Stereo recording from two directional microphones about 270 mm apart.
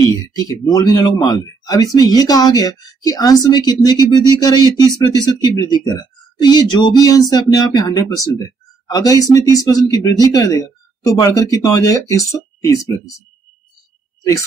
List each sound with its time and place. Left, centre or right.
0.5 s speech: centre
4.6 s speech: right
5.0 s speech: centre